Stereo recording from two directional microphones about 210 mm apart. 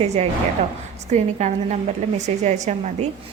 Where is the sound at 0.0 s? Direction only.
30° right (ahead or behind).